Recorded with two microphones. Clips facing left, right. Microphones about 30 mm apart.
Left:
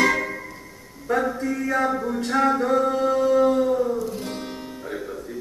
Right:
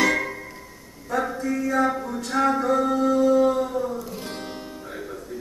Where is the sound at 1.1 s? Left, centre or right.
Left.